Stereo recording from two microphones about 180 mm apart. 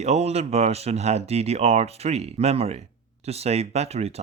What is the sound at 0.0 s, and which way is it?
Speech, 35° right (ahead or behind).